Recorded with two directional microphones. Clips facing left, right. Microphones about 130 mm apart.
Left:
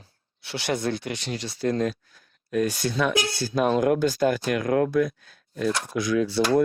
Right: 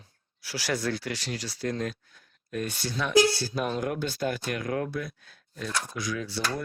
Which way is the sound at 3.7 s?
85° left.